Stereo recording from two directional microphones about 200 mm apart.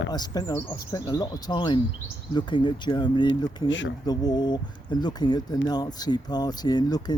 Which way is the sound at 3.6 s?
70° left (ahead or behind).